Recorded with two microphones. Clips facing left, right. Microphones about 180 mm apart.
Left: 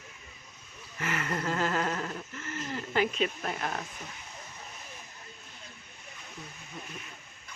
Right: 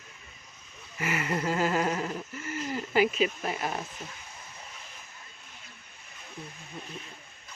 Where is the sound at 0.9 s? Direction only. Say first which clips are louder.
Right 3 dB; 10° right (ahead or behind).